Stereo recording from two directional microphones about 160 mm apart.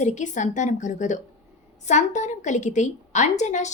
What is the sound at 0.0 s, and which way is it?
A woman's voice, 50° left (ahead or behind).